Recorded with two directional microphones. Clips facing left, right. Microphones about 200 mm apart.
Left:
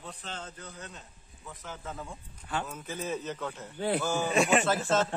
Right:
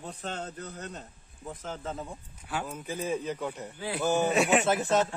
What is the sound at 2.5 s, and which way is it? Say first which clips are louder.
A man's voice: right 1 dB; 10° right (ahead or behind).